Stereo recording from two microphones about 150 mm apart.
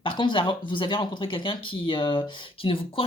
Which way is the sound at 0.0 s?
35° left (ahead or behind).